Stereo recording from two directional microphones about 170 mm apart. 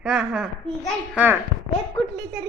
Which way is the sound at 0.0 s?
Centre (ahead or behind).